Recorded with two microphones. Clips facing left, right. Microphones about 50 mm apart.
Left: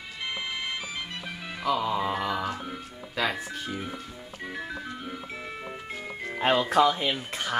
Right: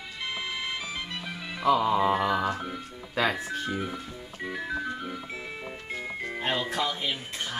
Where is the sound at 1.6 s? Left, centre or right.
Centre.